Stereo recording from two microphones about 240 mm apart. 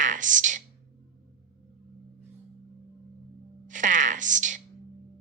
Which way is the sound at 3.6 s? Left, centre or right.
Right.